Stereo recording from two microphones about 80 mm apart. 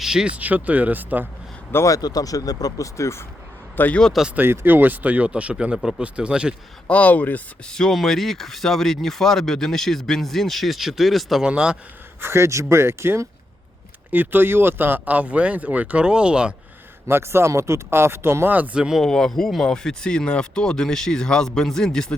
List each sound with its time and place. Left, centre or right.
0.0 s speech: centre
0.3 s speech: centre
1.7 s speech: left
2.0 s speech: left
3.8 s speech: centre
4.4 s speech: right; by 6.6 s centre
6.8 s speech: centre
7.7 s speech: centre
12.2 s speech: right; by 16.6 s centre
17.1 s speech: right
18.5 s speech: right
18.8 s speech: centre
19.0 s speech: centre